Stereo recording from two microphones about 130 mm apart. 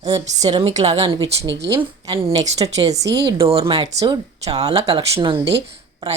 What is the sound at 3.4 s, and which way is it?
Speech, 45° right (ahead or behind).